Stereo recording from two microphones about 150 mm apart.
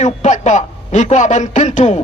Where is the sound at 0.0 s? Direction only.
50° left (ahead or behind).